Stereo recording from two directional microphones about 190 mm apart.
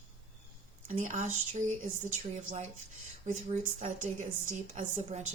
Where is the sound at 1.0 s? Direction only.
40° right (ahead or behind).